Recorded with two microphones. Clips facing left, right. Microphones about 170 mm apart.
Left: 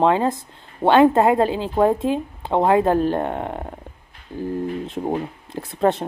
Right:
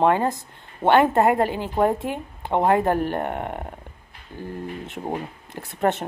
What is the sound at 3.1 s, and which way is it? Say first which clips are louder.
Speech: left 3 dB; 20° left (ahead or behind).